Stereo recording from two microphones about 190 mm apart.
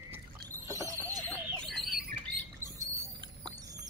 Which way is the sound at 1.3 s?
5° left (ahead or behind).